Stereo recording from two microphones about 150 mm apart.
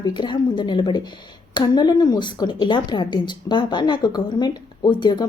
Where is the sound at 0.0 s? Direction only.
30° left (ahead or behind).